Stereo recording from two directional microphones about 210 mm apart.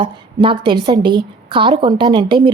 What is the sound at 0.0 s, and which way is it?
A woman's voice, 25° right (ahead or behind).